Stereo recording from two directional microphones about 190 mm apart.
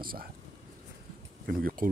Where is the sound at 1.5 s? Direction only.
50° right (ahead or behind).